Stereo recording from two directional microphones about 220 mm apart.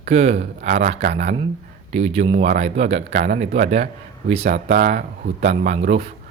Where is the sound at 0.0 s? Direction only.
30° right (ahead or behind).